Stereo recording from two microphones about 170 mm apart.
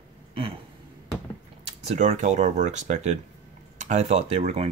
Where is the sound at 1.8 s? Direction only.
45° right (ahead or behind).